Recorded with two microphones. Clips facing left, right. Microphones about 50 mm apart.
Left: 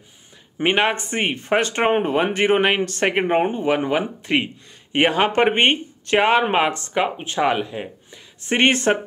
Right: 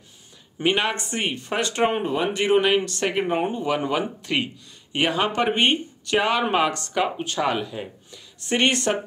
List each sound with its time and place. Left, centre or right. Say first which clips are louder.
0.6 s speech: left 3 dB; left
4.9 s speech: left 5 dB; left